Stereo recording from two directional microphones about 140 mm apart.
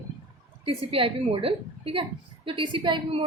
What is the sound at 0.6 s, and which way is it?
A woman's voice, 40° right (ahead or behind).